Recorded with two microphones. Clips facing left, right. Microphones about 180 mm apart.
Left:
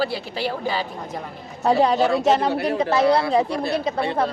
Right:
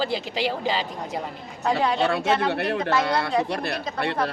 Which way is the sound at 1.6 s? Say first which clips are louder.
Left 5 dB; 35° left (ahead or behind).